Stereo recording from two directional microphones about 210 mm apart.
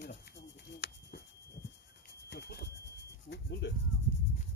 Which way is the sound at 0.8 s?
50° left (ahead or behind).